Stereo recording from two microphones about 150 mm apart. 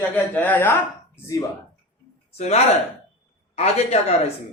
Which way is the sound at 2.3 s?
45° left (ahead or behind).